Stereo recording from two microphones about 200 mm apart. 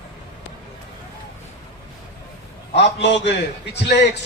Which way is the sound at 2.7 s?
60° left (ahead or behind).